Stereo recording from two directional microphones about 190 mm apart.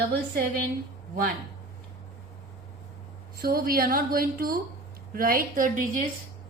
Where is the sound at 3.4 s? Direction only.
50° right (ahead or behind).